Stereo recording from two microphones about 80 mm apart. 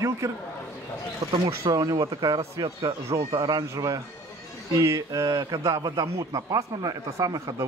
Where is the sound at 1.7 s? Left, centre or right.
Right.